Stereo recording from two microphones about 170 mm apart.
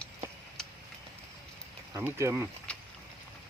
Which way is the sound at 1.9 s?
15° right (ahead or behind).